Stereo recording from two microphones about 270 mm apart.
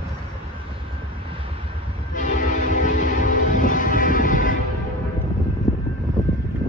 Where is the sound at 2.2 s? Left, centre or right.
Left.